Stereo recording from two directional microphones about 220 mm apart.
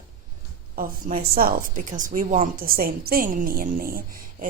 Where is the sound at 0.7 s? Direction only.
40° right (ahead or behind).